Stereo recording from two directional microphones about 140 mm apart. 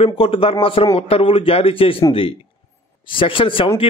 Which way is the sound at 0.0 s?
40° left (ahead or behind).